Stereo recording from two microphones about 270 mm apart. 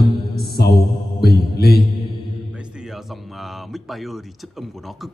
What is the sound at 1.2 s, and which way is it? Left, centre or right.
Mantra, left.